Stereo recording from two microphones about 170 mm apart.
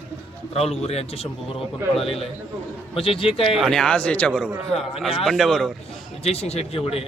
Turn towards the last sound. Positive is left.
turn(degrees=35)  # may be behind; listen again after turning